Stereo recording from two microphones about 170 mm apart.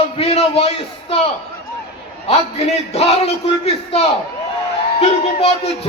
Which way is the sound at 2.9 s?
40° left (ahead or behind).